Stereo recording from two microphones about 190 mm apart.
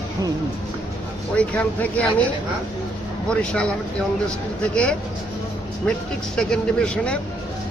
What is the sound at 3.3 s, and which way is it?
Speech, 5° left (ahead or behind).